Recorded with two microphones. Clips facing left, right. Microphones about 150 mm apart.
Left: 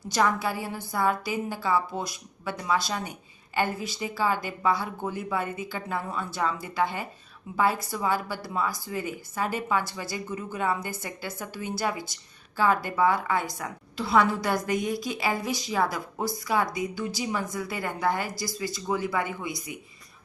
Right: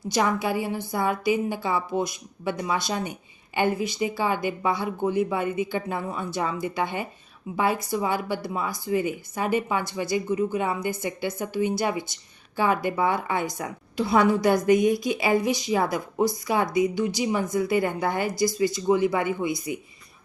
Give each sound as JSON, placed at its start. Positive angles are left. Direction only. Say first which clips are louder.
{"t": 0.1, "sound": "a woman's voice", "louder": "right 2 dB", "side_deg": -15}